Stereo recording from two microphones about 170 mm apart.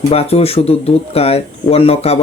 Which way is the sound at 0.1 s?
35° left (ahead or behind).